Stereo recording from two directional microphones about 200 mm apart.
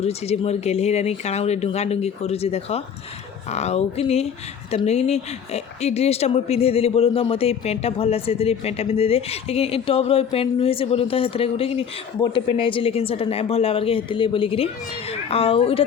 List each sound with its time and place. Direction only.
0.0 s speech: 30° left (ahead or behind)